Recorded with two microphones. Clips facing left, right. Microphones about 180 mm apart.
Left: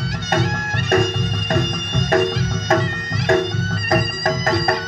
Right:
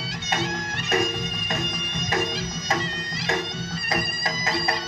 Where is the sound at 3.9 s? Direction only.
55° left (ahead or behind).